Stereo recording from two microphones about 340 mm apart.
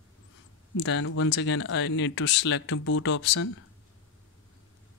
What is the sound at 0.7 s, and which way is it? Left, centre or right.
Speech, left.